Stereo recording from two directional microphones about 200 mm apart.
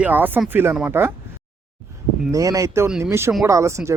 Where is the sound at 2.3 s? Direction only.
15° right (ahead or behind).